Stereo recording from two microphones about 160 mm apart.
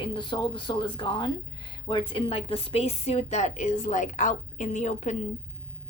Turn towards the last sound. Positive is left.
turn(degrees=45)  # may be behind; listen again after turning